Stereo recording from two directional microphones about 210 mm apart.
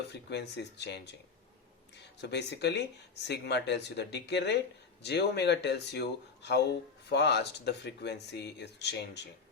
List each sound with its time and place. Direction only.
0.1 s speech: 55° left (ahead or behind)